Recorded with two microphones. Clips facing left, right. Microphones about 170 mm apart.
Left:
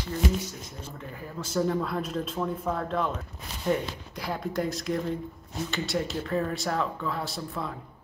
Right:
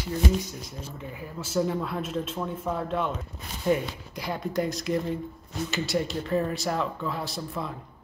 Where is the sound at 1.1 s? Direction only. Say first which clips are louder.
Right 1 dB; 5° right (ahead or behind).